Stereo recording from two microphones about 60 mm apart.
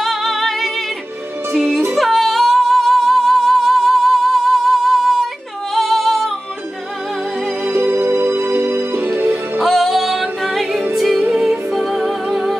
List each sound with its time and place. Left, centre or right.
0.0 s music: centre
2.0 s music: centre
5.8 s singing: centre
7.7 s music: right
9.6 s music: centre
11.2 s music: centre
11.7 s music: centre